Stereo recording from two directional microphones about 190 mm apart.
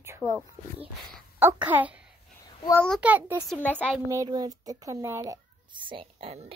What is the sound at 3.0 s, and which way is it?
Speech, 10° right (ahead or behind).